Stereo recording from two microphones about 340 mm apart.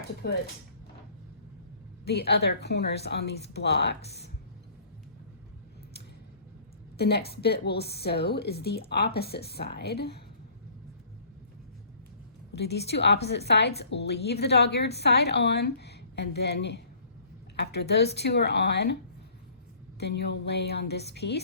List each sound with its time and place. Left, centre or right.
0.2 s a woman's voice: left
2.0 s a woman's voice: left
6.9 s a woman's voice: left
12.5 s a woman's voice: left
20.0 s a woman's voice: left